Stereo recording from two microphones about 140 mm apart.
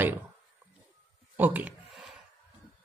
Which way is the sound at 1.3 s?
10° right (ahead or behind).